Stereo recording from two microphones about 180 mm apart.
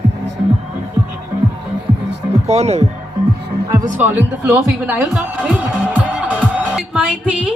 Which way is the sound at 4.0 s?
10° right (ahead or behind).